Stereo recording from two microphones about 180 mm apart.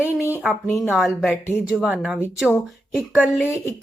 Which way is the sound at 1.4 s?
10° left (ahead or behind).